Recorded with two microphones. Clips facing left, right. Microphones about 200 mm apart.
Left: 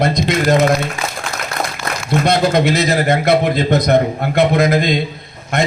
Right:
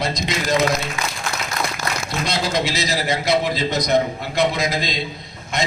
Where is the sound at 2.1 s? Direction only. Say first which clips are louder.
Left 11 dB; 55° left (ahead or behind).